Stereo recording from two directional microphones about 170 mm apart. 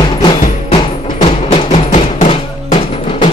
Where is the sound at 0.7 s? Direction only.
35° left (ahead or behind).